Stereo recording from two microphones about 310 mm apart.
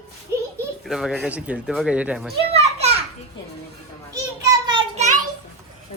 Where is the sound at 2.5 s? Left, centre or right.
Centre.